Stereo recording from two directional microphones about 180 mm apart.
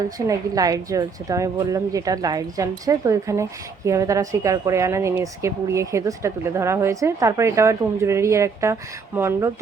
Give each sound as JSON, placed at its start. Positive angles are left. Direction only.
{"t": 0.3, "sound": "a woman's voice", "side_deg": -20}